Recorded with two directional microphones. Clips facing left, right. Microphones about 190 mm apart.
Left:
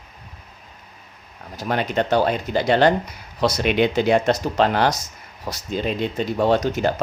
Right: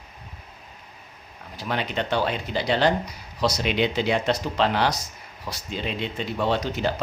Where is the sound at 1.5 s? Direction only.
45° left (ahead or behind).